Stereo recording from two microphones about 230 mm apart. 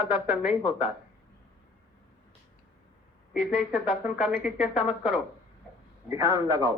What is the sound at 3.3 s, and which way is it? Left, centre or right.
Speech, centre.